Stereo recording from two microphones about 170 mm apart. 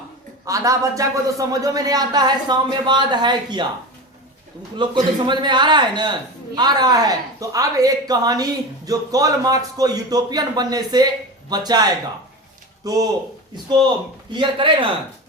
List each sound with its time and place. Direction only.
0.4 s speech: 20° right (ahead or behind)
4.8 s speech: 30° right (ahead or behind)
14.3 s speech: 30° right (ahead or behind)